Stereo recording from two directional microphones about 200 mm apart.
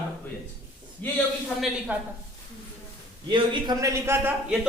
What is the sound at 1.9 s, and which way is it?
Speech, 5° right (ahead or behind).